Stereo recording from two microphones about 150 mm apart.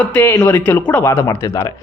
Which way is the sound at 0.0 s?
10° left (ahead or behind).